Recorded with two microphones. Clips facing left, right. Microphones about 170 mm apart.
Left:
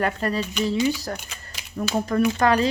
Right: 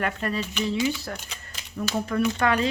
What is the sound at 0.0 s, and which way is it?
Speech, 35° left (ahead or behind).